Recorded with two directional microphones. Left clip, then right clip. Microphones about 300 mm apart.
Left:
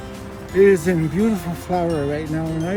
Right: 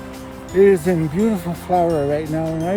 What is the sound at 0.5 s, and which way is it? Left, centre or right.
Speech, right.